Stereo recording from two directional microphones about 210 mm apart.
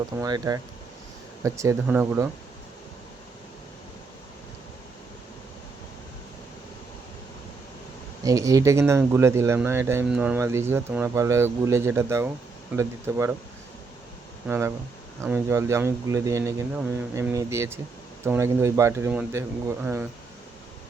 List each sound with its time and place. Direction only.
0.2 s speech: 15° right (ahead or behind)
8.2 s speech: 15° right (ahead or behind)
14.4 s speech: 10° right (ahead or behind)